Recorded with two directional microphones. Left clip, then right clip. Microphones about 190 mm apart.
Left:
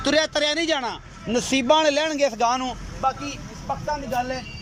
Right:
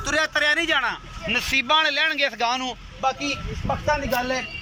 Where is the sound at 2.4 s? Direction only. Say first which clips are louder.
Left 2 dB; 5° left (ahead or behind).